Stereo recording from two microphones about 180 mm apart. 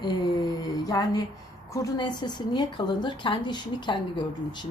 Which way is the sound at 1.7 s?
20° left (ahead or behind).